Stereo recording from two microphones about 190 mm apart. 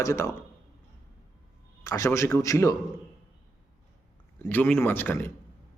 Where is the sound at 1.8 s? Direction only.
15° left (ahead or behind).